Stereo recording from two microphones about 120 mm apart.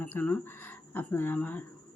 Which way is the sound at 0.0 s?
15° left (ahead or behind).